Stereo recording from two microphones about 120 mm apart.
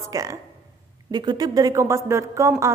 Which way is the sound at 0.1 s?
30° right (ahead or behind).